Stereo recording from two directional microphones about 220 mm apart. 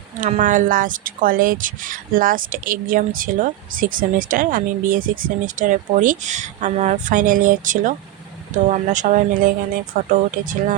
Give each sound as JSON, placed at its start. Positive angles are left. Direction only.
{"t": 0.2, "sound": "speech", "side_deg": -35}